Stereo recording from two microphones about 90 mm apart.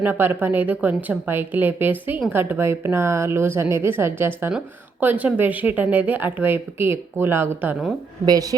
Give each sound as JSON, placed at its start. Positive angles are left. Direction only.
{"t": 0.0, "sound": "speech", "side_deg": -20}
{"t": 8.3, "sound": "a woman's voice", "side_deg": -40}